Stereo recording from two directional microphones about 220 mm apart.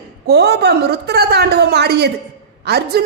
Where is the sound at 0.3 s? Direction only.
50° right (ahead or behind).